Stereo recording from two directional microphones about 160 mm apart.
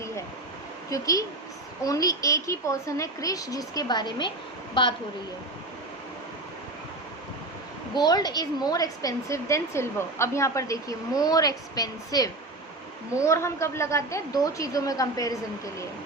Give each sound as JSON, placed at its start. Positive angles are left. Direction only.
{"t": 0.9, "sound": "a woman's voice", "side_deg": 20}
{"t": 7.9, "sound": "a woman's voice", "side_deg": 25}